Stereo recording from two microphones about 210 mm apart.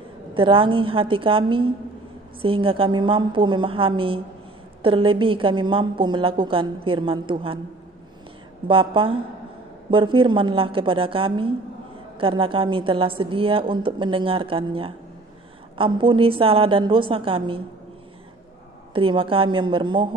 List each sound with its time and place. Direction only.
0.3 s a woman's voice: 25° right (ahead or behind)
8.6 s a woman's voice: 25° right (ahead or behind)
18.9 s a woman's voice: 25° right (ahead or behind)